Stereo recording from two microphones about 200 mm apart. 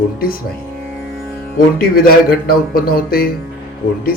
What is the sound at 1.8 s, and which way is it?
Speech, 50° left (ahead or behind).